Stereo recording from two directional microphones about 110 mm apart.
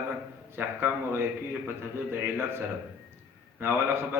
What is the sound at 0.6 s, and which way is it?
A man's voice, 20° right (ahead or behind).